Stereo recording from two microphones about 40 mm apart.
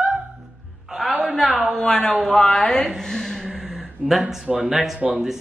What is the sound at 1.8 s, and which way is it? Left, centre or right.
Speech, centre.